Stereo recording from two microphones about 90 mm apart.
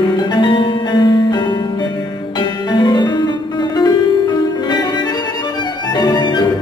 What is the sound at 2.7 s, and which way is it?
Music, 55° left (ahead or behind).